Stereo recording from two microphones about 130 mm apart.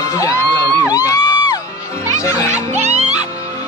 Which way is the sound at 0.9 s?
30° left (ahead or behind).